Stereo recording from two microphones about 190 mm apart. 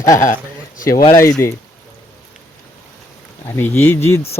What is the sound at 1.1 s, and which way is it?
Speech, 15° left (ahead or behind).